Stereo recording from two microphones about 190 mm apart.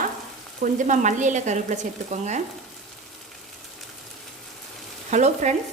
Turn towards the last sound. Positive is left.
turn(degrees=-40)  # may be behind; listen again after turning